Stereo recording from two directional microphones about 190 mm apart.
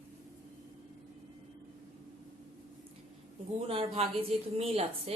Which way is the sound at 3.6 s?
30° right (ahead or behind).